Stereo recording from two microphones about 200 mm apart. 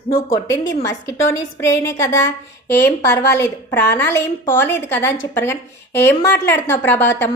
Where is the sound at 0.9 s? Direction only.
15° left (ahead or behind).